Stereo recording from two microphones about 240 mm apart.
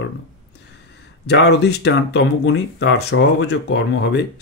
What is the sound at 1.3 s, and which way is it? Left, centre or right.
Speech, left.